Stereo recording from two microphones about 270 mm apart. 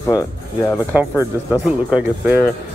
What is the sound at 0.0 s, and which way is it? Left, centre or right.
Speech, centre.